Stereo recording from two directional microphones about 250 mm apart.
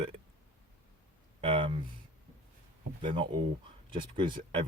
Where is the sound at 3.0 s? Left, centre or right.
Centre.